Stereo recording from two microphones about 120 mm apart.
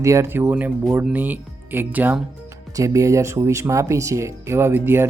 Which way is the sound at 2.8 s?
25° right (ahead or behind).